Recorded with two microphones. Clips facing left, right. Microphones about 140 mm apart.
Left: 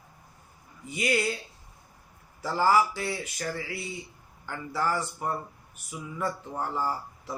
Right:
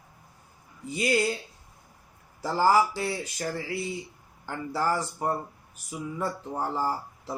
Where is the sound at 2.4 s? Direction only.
35° right (ahead or behind).